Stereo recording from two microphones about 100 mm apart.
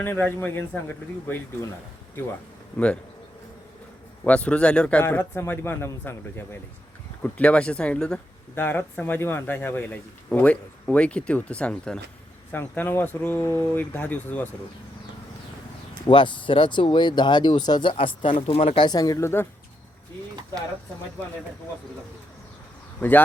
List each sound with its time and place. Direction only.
0.0 s speech: 20° left (ahead or behind)
2.7 s speech: 10° left (ahead or behind)
4.2 s speech: 10° left (ahead or behind)
5.0 s speech: 20° left (ahead or behind)
8.5 s speech: 20° left (ahead or behind)
16.0 s speech: 55° left (ahead or behind)
17.9 s speech: 60° left (ahead or behind)
18.9 s speech: 40° left (ahead or behind)
23.0 s speech: 15° left (ahead or behind)